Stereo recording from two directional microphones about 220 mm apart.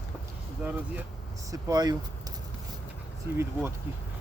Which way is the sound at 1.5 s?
15° right (ahead or behind).